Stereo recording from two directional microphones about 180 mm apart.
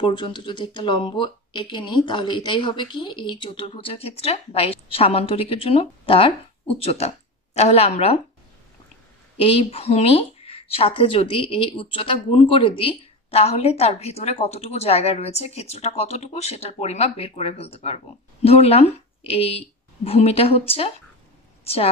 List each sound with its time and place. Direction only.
0.0 s speech: 25° left (ahead or behind)
9.6 s speech: 35° left (ahead or behind)